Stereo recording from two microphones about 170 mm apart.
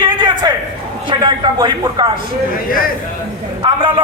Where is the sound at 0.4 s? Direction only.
20° right (ahead or behind).